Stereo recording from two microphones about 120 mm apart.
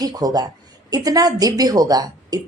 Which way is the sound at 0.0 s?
30° right (ahead or behind).